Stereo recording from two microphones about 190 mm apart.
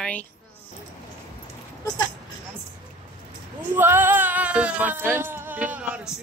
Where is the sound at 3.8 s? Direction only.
10° right (ahead or behind).